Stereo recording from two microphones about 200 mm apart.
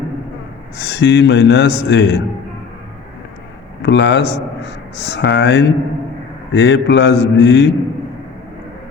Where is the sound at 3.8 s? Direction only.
60° left (ahead or behind).